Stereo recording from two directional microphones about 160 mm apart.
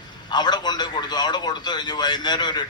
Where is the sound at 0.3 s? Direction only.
25° left (ahead or behind).